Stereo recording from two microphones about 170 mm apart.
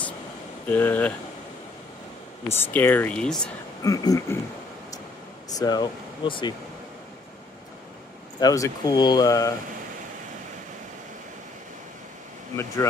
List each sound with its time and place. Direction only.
0.7 s speech: 10° left (ahead or behind)
2.4 s speech: 15° left (ahead or behind)
3.8 s speech: 20° left (ahead or behind)
5.5 s speech: 25° left (ahead or behind)
8.4 s speech: 20° left (ahead or behind)